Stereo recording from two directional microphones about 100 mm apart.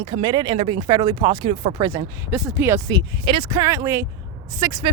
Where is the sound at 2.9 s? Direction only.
55° right (ahead or behind).